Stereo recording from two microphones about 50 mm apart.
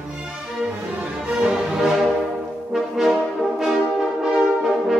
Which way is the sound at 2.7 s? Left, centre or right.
Centre.